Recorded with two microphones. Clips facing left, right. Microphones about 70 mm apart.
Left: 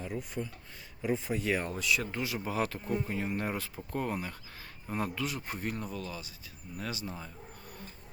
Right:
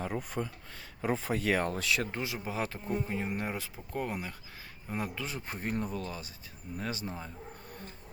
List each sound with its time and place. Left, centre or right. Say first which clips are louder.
0.1 s a sound: right 2 dB; right
1.3 s speech: right 2 dB; right
2.1 s speech: left 2 dB; right
5.2 s speech: left 2 dB; right